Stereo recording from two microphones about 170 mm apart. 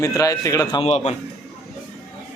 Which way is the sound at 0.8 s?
40° left (ahead or behind).